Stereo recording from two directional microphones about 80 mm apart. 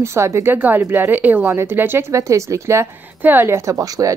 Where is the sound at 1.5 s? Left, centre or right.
Right.